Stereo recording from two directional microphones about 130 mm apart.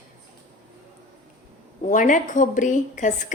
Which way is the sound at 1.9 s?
80° left.